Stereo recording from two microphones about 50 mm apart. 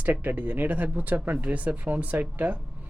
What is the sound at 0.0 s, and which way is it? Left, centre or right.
Speech, right.